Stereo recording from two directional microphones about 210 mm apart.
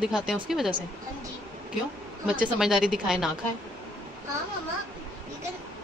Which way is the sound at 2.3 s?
5° right (ahead or behind).